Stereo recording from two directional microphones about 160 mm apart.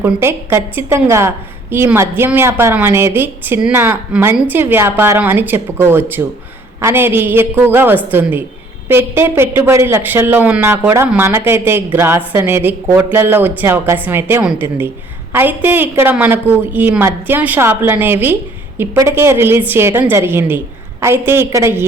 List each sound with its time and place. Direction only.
0.0 s a woman's voice: 15° right (ahead or behind)